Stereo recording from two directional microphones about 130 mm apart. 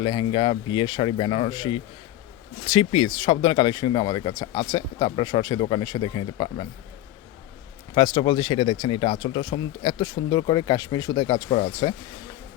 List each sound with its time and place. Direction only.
0.0 s speech: 35° left (ahead or behind)
7.9 s speech: 35° left (ahead or behind)